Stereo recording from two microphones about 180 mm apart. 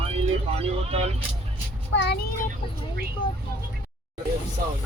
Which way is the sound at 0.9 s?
35° right (ahead or behind).